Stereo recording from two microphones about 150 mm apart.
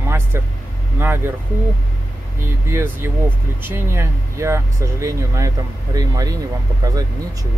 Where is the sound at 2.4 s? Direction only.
15° right (ahead or behind).